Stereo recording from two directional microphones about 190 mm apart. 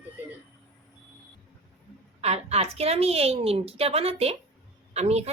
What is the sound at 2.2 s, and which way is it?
A woman's voice, 35° right (ahead or behind).